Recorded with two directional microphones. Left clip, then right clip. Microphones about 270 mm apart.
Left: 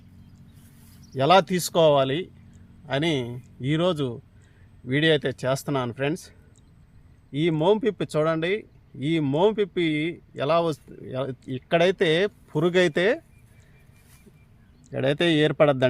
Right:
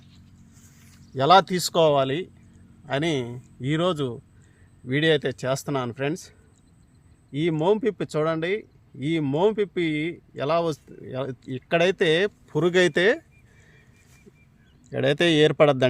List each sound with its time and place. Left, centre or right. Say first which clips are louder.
1.1 s speech: right 1 dB; centre; by 13.2 s right
14.9 s speech: right 2 dB; right